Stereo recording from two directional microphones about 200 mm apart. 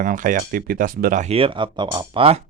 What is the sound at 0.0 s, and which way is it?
Speech, 40° right (ahead or behind).